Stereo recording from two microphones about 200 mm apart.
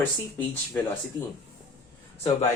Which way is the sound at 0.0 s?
10° left (ahead or behind).